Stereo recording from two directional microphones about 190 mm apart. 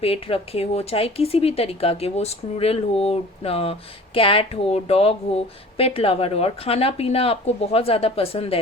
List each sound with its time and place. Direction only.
0.0 s a woman's voice: 30° left (ahead or behind)